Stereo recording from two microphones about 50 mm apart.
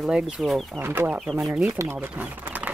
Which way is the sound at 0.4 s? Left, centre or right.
Centre.